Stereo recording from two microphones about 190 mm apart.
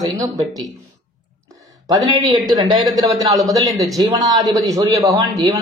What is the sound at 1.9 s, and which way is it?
A man's voice, 20° right (ahead or behind).